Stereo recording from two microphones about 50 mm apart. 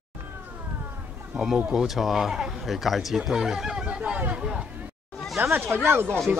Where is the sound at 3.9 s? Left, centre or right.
Right.